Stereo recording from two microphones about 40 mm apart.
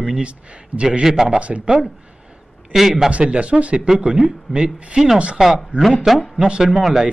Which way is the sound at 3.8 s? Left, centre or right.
Centre.